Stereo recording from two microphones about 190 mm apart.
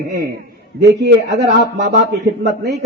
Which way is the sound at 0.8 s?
60° right (ahead or behind).